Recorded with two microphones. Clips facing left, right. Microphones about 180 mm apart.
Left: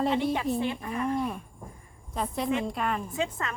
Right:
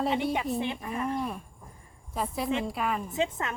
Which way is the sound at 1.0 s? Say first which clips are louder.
Left 3 dB; centre (ahead or behind).